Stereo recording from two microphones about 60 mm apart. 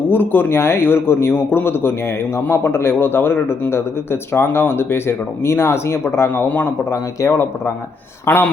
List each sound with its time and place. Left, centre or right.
0.1 s a man's voice: left
8.3 s a man's voice: left